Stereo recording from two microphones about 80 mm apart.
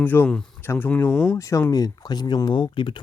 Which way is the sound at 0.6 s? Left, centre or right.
Left.